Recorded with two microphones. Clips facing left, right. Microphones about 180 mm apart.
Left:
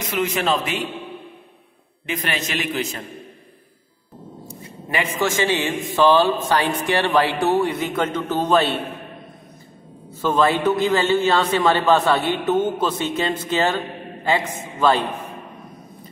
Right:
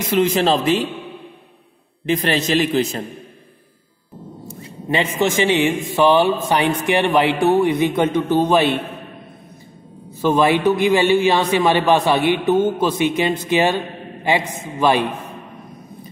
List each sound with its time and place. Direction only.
0.1 s a man's voice: 30° right (ahead or behind)
2.0 s a man's voice: 30° right (ahead or behind)
4.8 s a man's voice: 20° right (ahead or behind)
10.2 s a man's voice: 15° right (ahead or behind)